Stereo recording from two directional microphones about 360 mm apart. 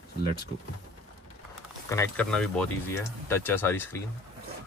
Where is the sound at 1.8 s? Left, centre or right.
Centre.